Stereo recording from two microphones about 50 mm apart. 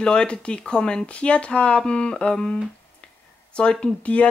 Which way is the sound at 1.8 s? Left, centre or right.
Centre.